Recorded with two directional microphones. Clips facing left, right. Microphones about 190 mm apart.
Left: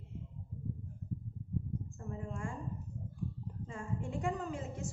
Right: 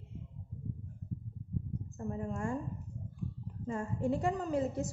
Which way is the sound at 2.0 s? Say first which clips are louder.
Right 9 dB; 40° right (ahead or behind).